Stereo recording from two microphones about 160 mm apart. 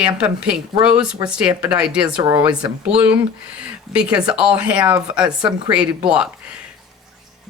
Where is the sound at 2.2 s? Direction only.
25° right (ahead or behind).